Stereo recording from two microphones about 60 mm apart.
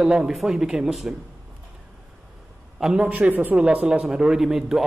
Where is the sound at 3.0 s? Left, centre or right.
Right.